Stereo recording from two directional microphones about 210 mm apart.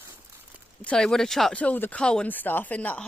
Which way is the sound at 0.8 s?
5° left (ahead or behind).